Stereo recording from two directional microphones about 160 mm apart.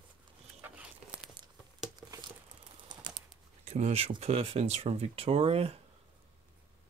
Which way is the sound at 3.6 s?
45° right (ahead or behind).